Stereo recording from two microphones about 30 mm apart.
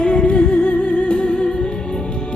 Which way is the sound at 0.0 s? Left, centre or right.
Left.